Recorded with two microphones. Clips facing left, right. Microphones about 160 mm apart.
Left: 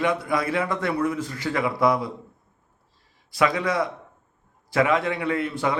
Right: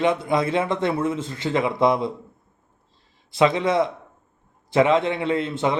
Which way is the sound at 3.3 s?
25° right (ahead or behind).